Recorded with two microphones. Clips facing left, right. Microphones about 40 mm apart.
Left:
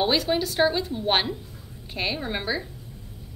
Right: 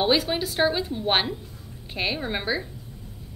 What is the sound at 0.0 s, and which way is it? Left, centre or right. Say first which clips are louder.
A woman's voice: even; centre.